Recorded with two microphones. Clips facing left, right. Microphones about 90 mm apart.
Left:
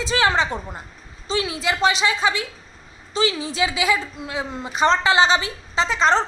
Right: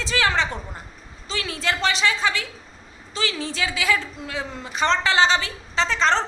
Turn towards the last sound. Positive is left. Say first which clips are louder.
# left 2 dB
turn(degrees=10)  # may be behind; listen again after turning